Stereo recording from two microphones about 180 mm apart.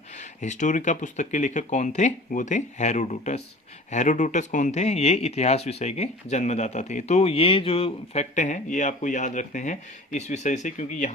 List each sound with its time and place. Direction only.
0.2 s speech: 40° left (ahead or behind)